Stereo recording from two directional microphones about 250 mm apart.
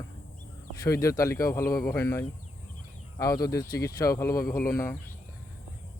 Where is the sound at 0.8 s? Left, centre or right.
Centre.